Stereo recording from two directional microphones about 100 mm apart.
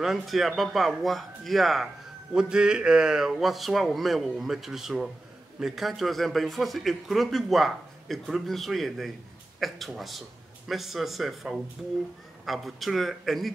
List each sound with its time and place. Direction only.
0.0 s a man's voice: centre (ahead or behind)